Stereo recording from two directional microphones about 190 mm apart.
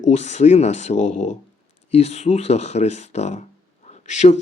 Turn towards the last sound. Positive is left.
turn(degrees=35)  # may be behind; listen again after turning